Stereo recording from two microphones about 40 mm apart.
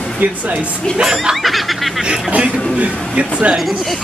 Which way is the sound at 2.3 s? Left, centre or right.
Right.